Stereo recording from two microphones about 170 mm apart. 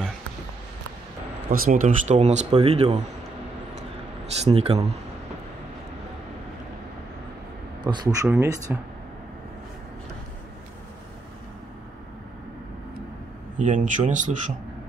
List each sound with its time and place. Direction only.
1.5 s speech: 55° right (ahead or behind); by 3.0 s 35° right (ahead or behind)
4.4 s speech: 40° right (ahead or behind)
7.8 s speech: 25° right (ahead or behind)
13.6 s speech: 50° right (ahead or behind)